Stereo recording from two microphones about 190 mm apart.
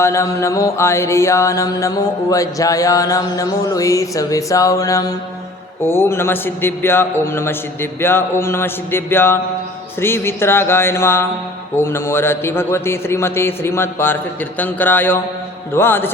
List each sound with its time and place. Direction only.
0.0 s mantra: 15° left (ahead or behind)